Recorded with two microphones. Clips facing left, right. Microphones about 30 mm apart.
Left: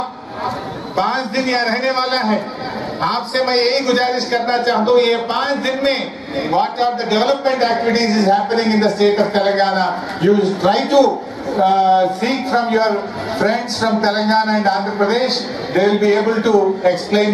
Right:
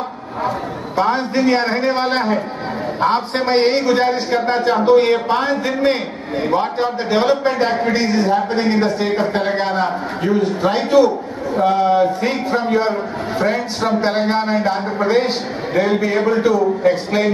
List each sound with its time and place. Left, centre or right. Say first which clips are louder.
0.9 s a man's voice: right 1 dB; left
11.5 s a man's voice: left 2 dB; left